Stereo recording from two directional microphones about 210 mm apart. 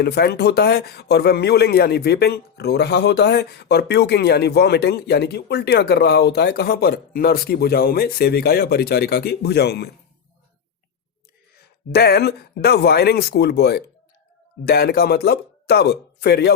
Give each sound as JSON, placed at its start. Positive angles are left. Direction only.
{"t": 0.0, "sound": "speech", "side_deg": 50}
{"t": 11.5, "sound": "speech", "side_deg": 50}